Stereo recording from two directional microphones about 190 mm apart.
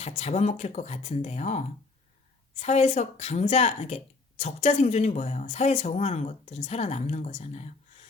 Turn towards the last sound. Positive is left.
turn(degrees=35)  # may be behind; listen again after turning